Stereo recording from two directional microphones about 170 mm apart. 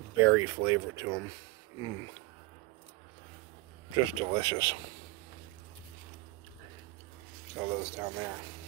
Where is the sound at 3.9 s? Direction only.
20° right (ahead or behind).